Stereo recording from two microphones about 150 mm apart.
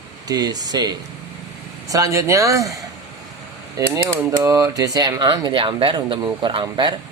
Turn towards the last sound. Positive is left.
turn(degrees=-30)  # may be behind; listen again after turning